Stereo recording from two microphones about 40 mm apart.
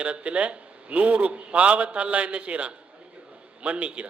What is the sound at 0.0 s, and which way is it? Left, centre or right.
A man's voice, right.